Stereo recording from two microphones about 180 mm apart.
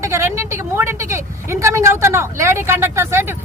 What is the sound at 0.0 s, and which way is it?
A woman's voice, 15° right (ahead or behind).